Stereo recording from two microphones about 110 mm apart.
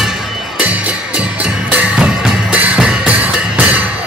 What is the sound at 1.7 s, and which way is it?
Music, 10° right (ahead or behind).